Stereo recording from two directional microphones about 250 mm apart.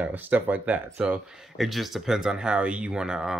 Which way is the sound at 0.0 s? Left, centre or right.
Centre.